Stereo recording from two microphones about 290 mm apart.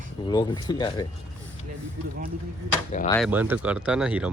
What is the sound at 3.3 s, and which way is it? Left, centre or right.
Speech, centre.